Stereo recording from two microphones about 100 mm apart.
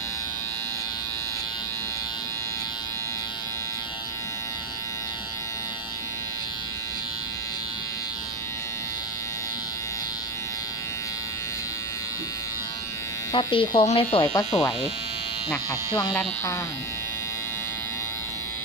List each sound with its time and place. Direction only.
13.3 s speech: 60° left (ahead or behind)
14.3 s speech: 40° left (ahead or behind)